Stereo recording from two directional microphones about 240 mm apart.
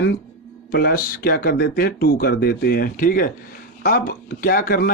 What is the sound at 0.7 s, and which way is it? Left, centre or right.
Speech, left.